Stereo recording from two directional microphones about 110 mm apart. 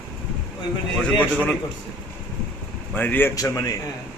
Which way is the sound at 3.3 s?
35° left (ahead or behind).